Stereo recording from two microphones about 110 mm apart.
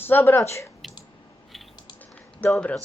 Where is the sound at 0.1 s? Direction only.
20° left (ahead or behind).